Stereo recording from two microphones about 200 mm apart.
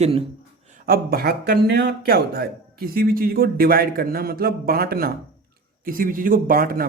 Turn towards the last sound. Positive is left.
turn(degrees=-45)  # may be behind; listen again after turning